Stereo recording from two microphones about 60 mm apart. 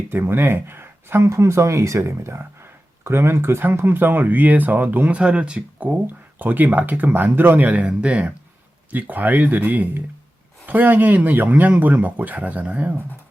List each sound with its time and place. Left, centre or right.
0.1 s speech: right
5.2 s speech: centre
8.9 s speech: right